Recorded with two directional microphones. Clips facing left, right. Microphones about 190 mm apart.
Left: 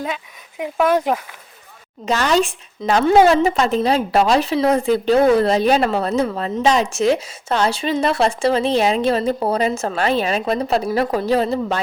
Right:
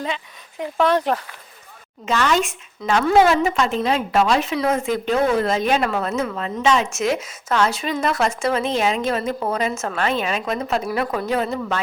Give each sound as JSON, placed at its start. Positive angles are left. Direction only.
{"t": 0.6, "sound": "speech", "side_deg": 10}
{"t": 2.0, "sound": "speech", "side_deg": 35}